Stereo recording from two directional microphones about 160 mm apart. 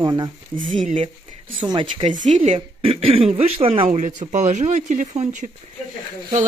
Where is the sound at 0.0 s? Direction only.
25° right (ahead or behind).